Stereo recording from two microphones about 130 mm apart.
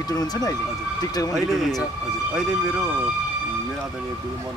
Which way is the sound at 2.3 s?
5° right (ahead or behind).